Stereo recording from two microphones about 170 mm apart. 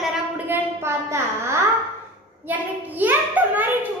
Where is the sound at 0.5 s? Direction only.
15° right (ahead or behind).